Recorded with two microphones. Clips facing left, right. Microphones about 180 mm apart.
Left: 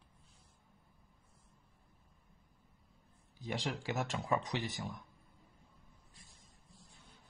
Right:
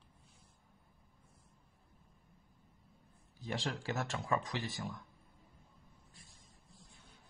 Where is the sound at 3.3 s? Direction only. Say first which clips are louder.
Even; 15° left (ahead or behind).